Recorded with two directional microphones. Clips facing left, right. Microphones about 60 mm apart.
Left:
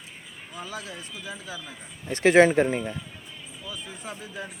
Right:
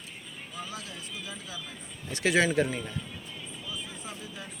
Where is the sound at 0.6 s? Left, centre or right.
Left.